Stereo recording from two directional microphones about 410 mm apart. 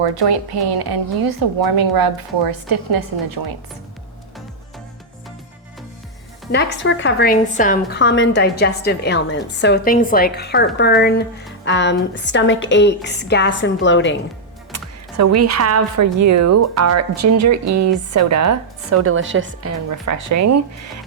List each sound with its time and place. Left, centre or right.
0.0 s a woman's voice: right
6.5 s a woman's voice: left
15.2 s speech: right
20.3 s speech: right